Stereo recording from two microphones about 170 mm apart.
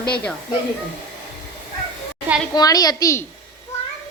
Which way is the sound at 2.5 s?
25° left (ahead or behind).